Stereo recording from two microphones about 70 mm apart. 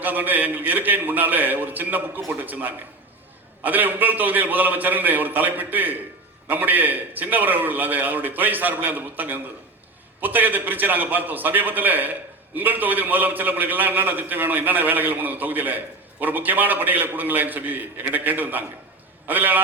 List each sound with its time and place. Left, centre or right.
0.0 s a man's voice: right